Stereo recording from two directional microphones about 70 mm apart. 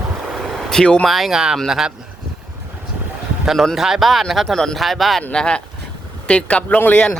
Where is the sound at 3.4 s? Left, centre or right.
Centre.